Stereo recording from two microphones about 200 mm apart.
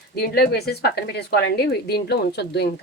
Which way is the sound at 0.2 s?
50° left (ahead or behind).